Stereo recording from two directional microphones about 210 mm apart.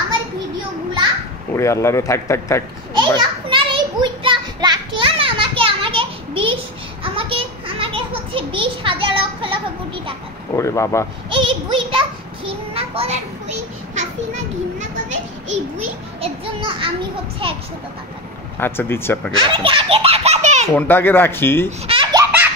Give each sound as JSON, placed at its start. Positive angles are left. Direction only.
{"t": 1.5, "sound": "speech", "side_deg": 15}
{"t": 3.2, "sound": "children playing", "side_deg": -25}
{"t": 10.5, "sound": "speech", "side_deg": 15}
{"t": 11.2, "sound": "a sound", "side_deg": -25}
{"t": 13.9, "sound": "children playing", "side_deg": -35}
{"t": 16.2, "sound": "a sound", "side_deg": -25}
{"t": 18.6, "sound": "speech", "side_deg": 10}
{"t": 19.5, "sound": "belly laugh", "side_deg": -25}
{"t": 20.7, "sound": "speech", "side_deg": 10}
{"t": 21.6, "sound": "laughter", "side_deg": -25}